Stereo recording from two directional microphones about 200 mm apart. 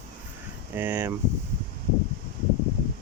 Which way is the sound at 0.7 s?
10° right (ahead or behind).